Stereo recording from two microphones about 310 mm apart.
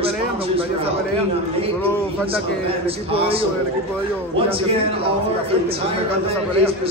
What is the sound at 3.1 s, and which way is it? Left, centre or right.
Speech, centre.